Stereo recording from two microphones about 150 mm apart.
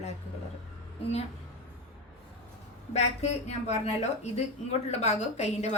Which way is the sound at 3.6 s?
50° left (ahead or behind).